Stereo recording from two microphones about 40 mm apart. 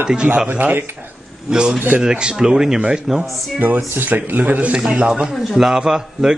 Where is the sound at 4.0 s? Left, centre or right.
Right.